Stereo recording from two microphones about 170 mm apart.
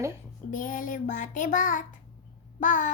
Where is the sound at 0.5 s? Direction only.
50° left (ahead or behind).